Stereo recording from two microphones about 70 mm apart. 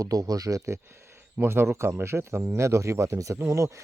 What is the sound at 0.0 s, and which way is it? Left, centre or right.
Speech, right.